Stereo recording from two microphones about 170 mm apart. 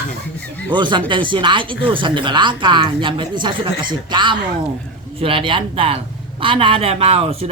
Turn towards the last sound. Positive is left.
turn(degrees=-35)  # may be behind; listen again after turning